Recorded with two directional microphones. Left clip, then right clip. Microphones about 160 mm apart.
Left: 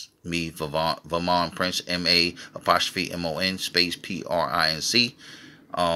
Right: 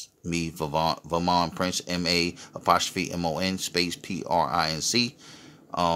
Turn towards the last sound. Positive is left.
turn(degrees=-30)  # may be behind; listen again after turning